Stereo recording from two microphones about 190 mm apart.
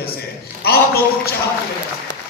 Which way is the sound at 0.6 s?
55° left (ahead or behind).